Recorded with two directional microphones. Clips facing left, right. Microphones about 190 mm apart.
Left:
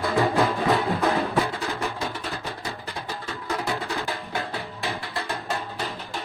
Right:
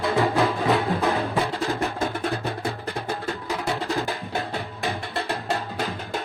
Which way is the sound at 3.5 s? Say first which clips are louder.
Left 1 dB; centre (ahead or behind).